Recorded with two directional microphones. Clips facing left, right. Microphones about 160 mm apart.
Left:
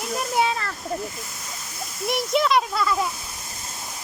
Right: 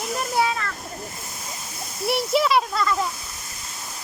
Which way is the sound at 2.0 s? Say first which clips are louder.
Right 1 dB; 5° right (ahead or behind).